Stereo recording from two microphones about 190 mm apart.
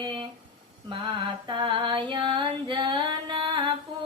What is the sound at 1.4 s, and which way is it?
Female singing, 25° right (ahead or behind).